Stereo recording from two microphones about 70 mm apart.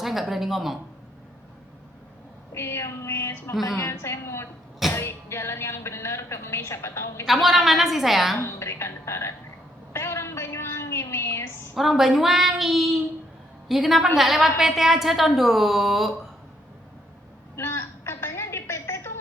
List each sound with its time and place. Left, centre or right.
0.0 s speech: centre
2.5 s speech: left
7.3 s a woman's voice: centre
8.4 s speech: left
9.9 s a sound: left
11.7 s a woman's voice: centre
17.6 s a sound: left